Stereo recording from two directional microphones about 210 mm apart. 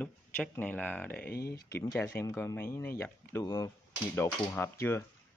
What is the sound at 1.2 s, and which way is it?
Speech, 45° left (ahead or behind).